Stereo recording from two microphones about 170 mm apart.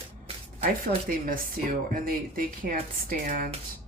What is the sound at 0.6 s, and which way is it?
Speech, 60° right (ahead or behind).